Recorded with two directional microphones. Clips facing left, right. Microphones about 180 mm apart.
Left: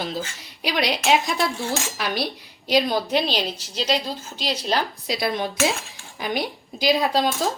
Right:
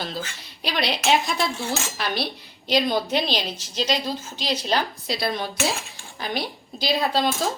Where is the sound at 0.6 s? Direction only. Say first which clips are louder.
Left 2 dB; 10° left (ahead or behind).